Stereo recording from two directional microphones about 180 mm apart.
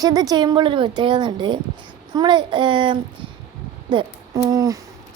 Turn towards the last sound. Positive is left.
turn(degrees=-20)  # may be behind; listen again after turning